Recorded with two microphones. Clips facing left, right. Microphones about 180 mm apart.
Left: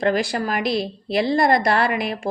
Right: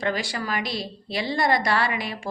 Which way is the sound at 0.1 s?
60° left (ahead or behind).